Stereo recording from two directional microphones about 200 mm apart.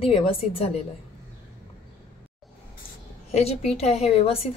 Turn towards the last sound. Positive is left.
turn(degrees=30)  # may be behind; listen again after turning